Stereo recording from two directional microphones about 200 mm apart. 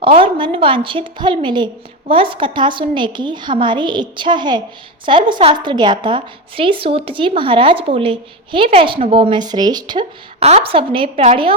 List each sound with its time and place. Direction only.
0.0 s a woman's voice: 25° right (ahead or behind)